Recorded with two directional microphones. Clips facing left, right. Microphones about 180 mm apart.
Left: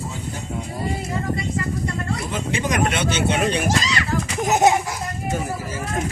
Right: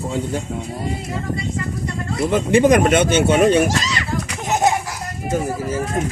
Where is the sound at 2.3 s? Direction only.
55° right (ahead or behind).